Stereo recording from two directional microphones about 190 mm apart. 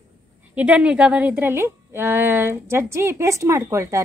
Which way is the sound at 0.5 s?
5° right (ahead or behind).